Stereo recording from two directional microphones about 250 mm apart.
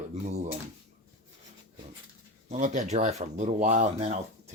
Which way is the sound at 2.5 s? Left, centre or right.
Right.